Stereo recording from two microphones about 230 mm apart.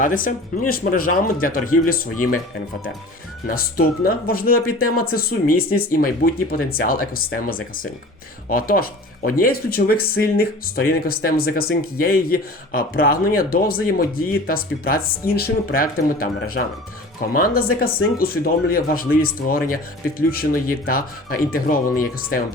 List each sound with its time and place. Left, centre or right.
0.0 s speech: left
3.4 s speech: left